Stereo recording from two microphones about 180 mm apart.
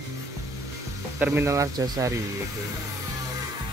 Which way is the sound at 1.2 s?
10° right (ahead or behind).